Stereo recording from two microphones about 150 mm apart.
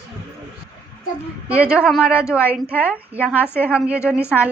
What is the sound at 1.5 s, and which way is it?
A woman's voice, 10° right (ahead or behind).